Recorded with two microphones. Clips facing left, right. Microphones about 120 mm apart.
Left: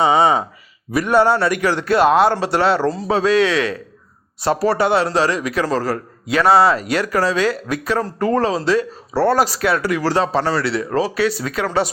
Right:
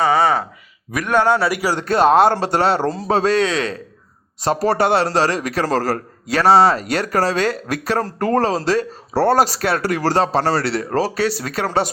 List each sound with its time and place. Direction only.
0.0 s a sound: 20° left (ahead or behind)
0.9 s a man's voice: 5° left (ahead or behind)
1.4 s speech: 5° right (ahead or behind)
1.7 s speech: 40° right (ahead or behind)
4.4 s speech: 40° right (ahead or behind)
7.3 s speech: 55° right (ahead or behind)
8.2 s speech: 40° right (ahead or behind)